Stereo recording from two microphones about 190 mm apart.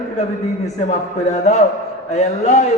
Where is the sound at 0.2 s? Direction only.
35° left (ahead or behind).